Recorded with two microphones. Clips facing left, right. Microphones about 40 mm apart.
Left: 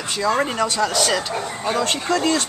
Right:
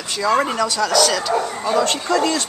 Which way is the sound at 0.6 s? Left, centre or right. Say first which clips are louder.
Right 3 dB; centre.